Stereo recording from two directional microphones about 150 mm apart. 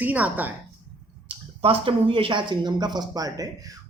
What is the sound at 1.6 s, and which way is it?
Speech, 40° right (ahead or behind).